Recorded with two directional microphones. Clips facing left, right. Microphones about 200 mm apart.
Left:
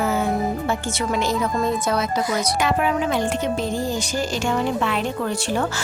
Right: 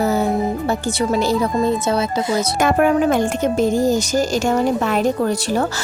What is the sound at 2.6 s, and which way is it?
A woman's voice, 50° right (ahead or behind).